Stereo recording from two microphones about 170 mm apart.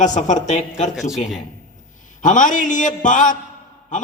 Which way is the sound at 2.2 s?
50° left (ahead or behind).